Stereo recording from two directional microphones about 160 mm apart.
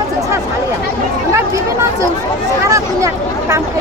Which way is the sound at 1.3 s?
20° right (ahead or behind).